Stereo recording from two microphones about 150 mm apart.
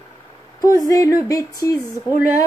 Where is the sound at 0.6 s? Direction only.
25° left (ahead or behind).